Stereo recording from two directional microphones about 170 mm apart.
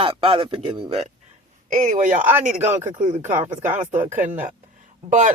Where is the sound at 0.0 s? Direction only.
30° right (ahead or behind).